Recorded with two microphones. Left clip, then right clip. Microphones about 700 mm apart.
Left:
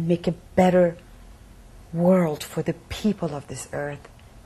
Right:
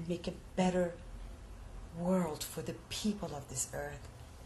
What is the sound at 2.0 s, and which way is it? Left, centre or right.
A woman's voice, left.